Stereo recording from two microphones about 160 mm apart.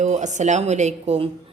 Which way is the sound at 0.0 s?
50° right (ahead or behind).